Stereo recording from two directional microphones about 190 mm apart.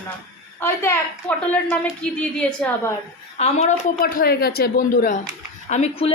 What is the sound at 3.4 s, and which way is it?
Speech, 40° left (ahead or behind).